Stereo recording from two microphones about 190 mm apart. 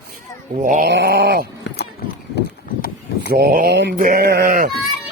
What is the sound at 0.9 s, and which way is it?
Sheep, 60° right (ahead or behind).